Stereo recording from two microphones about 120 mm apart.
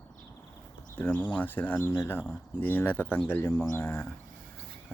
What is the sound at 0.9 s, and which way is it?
Speech, 10° left (ahead or behind).